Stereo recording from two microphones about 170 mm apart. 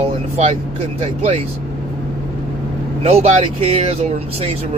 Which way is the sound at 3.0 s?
40° right (ahead or behind).